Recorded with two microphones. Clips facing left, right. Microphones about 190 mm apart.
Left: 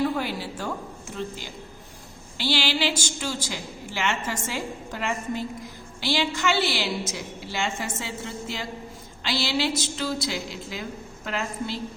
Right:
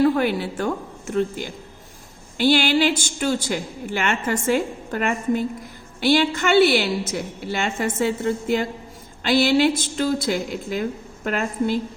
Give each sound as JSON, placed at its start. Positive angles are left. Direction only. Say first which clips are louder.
{"t": 0.0, "sound": "a woman's voice", "louder": "right 7 dB", "side_deg": -60}